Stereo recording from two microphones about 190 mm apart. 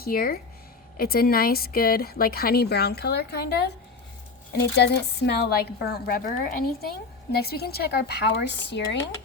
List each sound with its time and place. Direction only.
0.0 s speech: 50° left (ahead or behind)
4.8 s a woman's voice: 60° left (ahead or behind)